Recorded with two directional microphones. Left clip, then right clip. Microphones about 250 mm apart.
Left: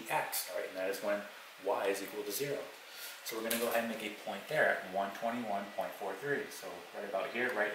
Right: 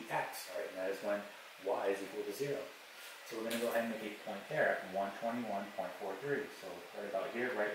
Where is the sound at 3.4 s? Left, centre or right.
Centre.